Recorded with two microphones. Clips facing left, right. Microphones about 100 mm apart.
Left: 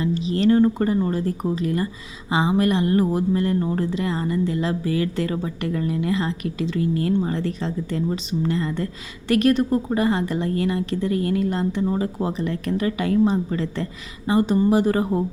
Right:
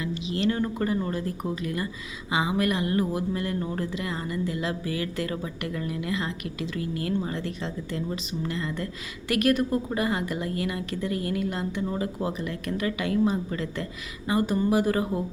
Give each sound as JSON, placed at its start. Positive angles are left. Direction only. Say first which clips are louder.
{"t": 0.0, "sound": "speech", "louder": "left 7 dB", "side_deg": 35}